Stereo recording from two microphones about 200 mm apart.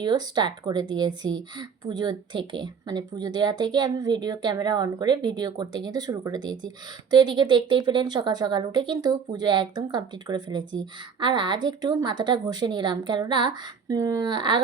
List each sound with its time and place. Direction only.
0.0 s a woman's voice: 20° right (ahead or behind)